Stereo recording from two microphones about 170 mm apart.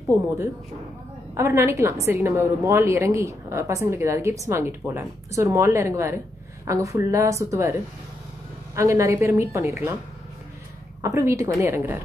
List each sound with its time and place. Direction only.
1.3 s a woman's voice: 15° right (ahead or behind)
8.7 s a woman's voice: 15° right (ahead or behind)
11.0 s a woman's voice: 15° right (ahead or behind)